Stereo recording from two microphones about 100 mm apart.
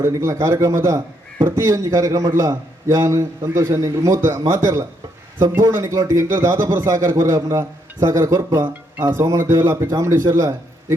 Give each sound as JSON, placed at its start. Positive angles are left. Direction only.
{"t": 0.0, "sound": "a man's voice", "side_deg": -25}